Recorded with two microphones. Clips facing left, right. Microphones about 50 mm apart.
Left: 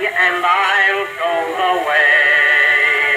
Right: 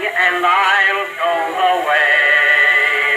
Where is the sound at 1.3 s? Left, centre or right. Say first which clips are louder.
Right 1 dB; centre.